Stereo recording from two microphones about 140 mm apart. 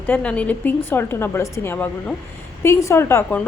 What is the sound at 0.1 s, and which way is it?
A woman's voice, 10° left (ahead or behind).